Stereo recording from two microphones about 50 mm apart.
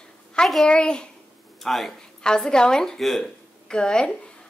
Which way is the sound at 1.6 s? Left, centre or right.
Centre.